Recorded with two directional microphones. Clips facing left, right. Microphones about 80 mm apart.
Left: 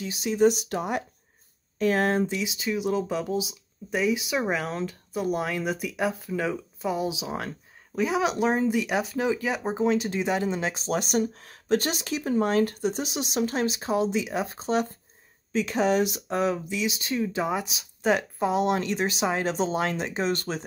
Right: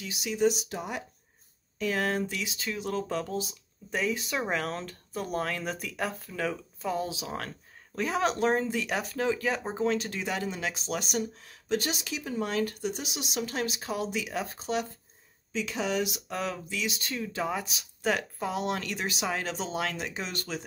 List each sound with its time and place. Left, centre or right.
0.0 s speech: left
0.7 s speech: left
1.8 s speech: left
2.2 s speech: centre
17.2 s speech: left